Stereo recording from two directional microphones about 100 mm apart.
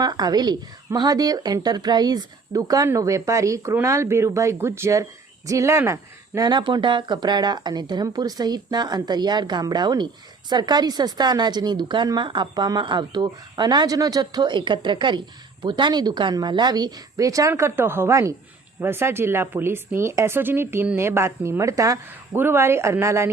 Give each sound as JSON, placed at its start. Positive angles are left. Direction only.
{"t": 0.0, "sound": "a woman's voice", "side_deg": -45}
{"t": 6.5, "sound": "a woman's voice", "side_deg": -50}